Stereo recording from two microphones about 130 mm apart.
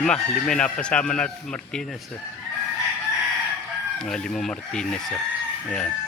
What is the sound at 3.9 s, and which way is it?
Speech, 5° left (ahead or behind).